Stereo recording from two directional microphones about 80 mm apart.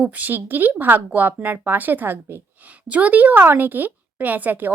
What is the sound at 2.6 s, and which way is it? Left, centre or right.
A woman's voice, centre.